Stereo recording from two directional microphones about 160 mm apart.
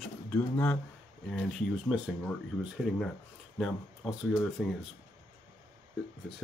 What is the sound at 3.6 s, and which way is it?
Speech, centre (ahead or behind).